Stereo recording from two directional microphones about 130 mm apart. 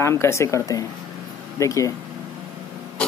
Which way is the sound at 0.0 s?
20° left (ahead or behind).